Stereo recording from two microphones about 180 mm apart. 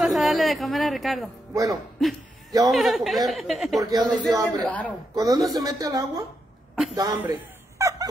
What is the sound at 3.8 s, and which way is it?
Speech, 20° right (ahead or behind).